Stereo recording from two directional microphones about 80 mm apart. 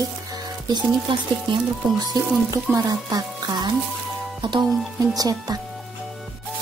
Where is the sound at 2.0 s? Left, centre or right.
Right.